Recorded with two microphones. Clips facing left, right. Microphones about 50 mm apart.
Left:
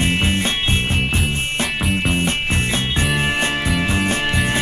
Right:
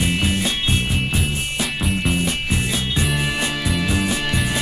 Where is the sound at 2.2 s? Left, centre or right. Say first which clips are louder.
Left 2 dB; left.